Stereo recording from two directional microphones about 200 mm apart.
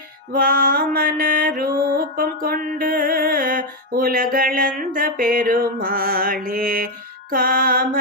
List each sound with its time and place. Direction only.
0.3 s mantra: 45° right (ahead or behind)